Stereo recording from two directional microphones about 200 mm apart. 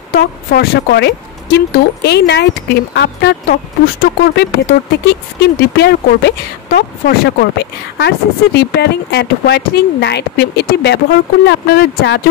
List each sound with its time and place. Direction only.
0.1 s a woman's voice: 50° left (ahead or behind)